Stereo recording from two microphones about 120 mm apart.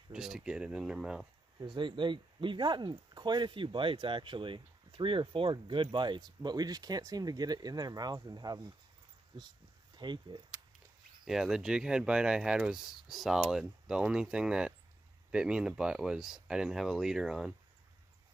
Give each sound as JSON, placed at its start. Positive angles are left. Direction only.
{"t": 0.1, "sound": "speech", "side_deg": -5}
{"t": 1.6, "sound": "speech", "side_deg": -40}
{"t": 11.2, "sound": "speech", "side_deg": 0}